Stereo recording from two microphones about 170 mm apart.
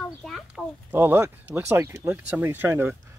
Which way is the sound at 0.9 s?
15° right (ahead or behind).